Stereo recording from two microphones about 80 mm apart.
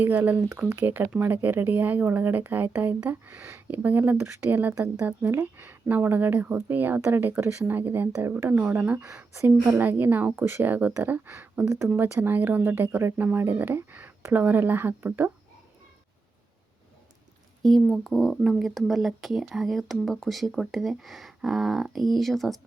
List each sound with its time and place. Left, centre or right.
0.0 s a woman's voice: right
5.4 s a woman's voice: right
9.6 s a woman's voice: right
17.6 s speech: centre